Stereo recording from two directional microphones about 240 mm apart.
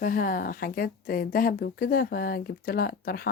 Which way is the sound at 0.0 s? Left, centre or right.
Left.